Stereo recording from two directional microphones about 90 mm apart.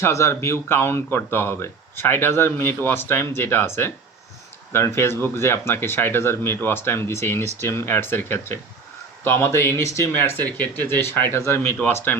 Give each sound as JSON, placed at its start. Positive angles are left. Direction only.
{"t": 0.0, "sound": "speech", "side_deg": 35}